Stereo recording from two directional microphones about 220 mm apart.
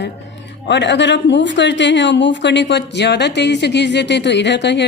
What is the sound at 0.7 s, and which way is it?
Speech, 50° left (ahead or behind).